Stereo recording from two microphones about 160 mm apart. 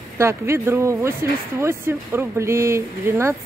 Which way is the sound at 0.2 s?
15° right (ahead or behind).